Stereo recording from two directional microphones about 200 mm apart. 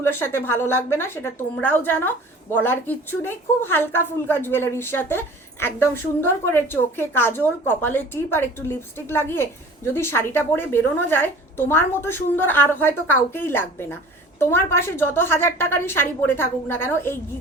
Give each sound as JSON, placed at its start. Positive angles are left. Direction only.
{"t": 0.0, "sound": "a woman's voice", "side_deg": 10}